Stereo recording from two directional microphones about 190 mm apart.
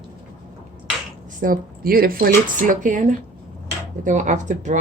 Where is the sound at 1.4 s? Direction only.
50° right (ahead or behind).